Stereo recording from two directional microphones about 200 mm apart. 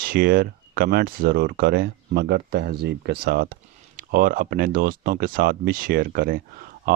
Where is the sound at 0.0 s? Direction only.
45° right (ahead or behind).